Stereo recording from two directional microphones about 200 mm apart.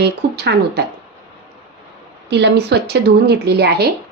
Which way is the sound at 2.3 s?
60° right (ahead or behind).